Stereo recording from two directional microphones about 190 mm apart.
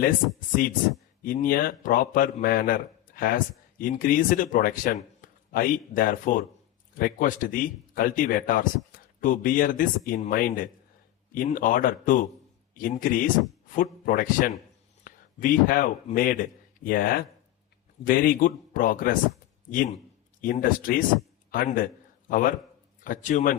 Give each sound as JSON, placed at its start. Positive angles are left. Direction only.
{"t": 0.0, "sound": "speech", "side_deg": 45}
{"t": 15.0, "sound": "a sound", "side_deg": 45}
{"t": 16.1, "sound": "speech", "side_deg": 50}
{"t": 20.4, "sound": "speech", "side_deg": 45}